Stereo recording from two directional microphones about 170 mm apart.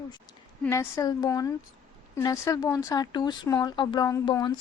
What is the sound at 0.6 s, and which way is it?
A woman's voice, 15° left (ahead or behind).